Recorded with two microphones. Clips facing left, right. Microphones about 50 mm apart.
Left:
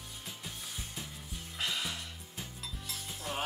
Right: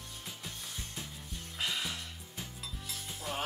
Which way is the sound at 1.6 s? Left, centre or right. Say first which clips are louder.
Even; centre.